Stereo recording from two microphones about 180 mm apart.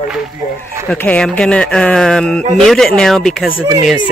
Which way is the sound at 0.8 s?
10° left (ahead or behind).